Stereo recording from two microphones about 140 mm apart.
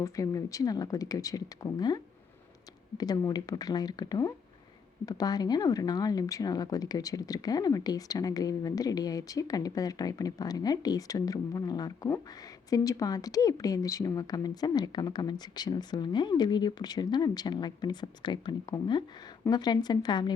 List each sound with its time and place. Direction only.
0.0 s speech: 25° left (ahead or behind)
3.0 s speech: 25° left (ahead or behind)